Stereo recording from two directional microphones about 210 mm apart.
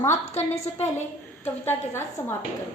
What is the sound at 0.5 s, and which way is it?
Speech, 30° left (ahead or behind).